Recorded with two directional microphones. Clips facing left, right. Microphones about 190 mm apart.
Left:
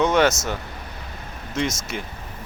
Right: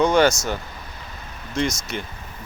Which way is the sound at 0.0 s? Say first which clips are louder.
Right 1 dB; 5° left (ahead or behind).